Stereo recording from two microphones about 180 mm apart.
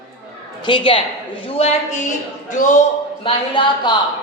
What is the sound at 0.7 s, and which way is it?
A woman's voice, 30° left (ahead or behind).